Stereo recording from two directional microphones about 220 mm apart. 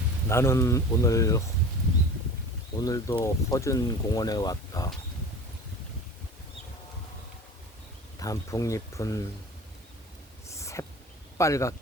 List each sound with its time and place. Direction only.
0.3 s speech: 10° left (ahead or behind)
2.7 s speech: 15° left (ahead or behind)
8.2 s speech: 15° left (ahead or behind)
10.4 s a sound: 15° left (ahead or behind)
11.3 s speech: 15° left (ahead or behind)